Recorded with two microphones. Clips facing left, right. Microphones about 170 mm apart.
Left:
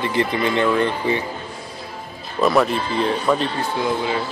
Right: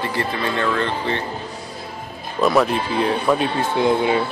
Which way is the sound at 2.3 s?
Centre (ahead or behind).